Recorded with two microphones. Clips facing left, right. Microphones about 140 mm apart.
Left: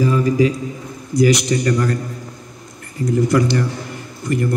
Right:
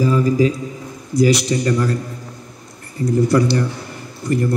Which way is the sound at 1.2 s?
30° right (ahead or behind).